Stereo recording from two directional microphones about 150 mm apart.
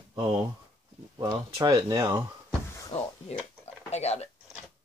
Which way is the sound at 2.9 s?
40° left (ahead or behind).